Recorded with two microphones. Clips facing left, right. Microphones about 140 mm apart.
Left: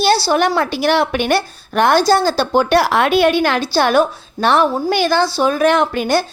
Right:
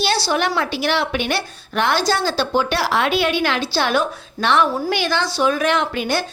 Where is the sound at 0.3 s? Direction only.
45° left (ahead or behind).